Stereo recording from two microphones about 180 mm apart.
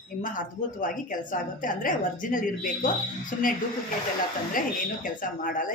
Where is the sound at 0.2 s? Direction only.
45° left (ahead or behind).